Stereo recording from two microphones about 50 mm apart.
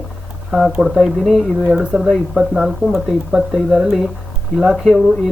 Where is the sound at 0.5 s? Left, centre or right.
Centre.